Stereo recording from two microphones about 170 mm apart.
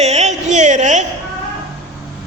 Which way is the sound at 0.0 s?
40° right (ahead or behind).